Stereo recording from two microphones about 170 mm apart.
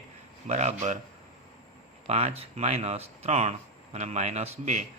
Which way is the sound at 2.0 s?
40° right (ahead or behind).